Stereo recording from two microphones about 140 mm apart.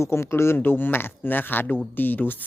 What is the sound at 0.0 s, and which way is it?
A man's voice, 20° left (ahead or behind).